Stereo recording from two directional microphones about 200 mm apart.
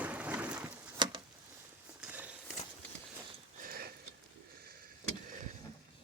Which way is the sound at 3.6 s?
50° right (ahead or behind).